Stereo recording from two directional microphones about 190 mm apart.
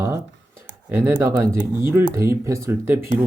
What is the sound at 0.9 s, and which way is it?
Speech, 10° right (ahead or behind).